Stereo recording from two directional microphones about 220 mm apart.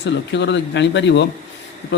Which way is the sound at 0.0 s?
55° left (ahead or behind).